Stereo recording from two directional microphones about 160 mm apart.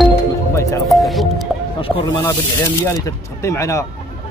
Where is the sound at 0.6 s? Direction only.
20° left (ahead or behind).